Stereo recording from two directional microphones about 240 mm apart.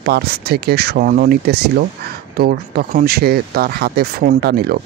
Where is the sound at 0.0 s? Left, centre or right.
Right.